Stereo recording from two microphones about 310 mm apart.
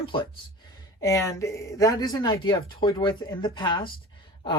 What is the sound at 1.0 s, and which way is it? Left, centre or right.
Speech, centre.